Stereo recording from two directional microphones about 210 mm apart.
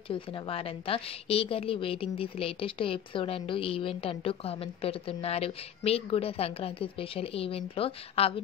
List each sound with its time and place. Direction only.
0.1 s a woman's voice: 25° left (ahead or behind)